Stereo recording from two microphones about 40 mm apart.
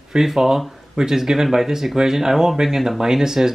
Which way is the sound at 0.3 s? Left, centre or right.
Centre.